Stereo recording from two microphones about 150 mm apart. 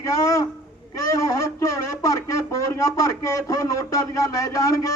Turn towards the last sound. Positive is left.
turn(degrees=25)  # may be behind; listen again after turning